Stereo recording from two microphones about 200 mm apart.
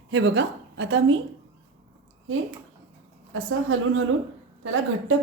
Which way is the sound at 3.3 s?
80° right.